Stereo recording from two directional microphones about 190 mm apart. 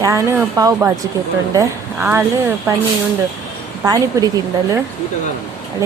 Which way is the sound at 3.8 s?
20° right (ahead or behind).